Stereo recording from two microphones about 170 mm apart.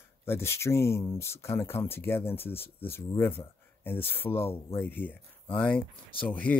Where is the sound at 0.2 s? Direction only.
15° left (ahead or behind).